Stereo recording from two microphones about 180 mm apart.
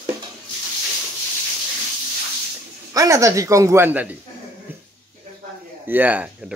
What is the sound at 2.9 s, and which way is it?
Speech, 20° right (ahead or behind).